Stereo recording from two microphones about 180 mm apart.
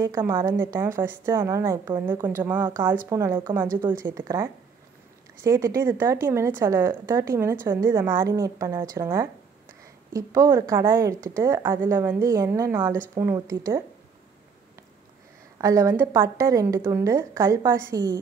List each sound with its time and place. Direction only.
0.0 s a woman's voice: 15° right (ahead or behind)
15.6 s a woman's voice: 15° right (ahead or behind)